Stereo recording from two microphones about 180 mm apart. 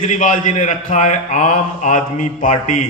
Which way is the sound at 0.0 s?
45° left (ahead or behind).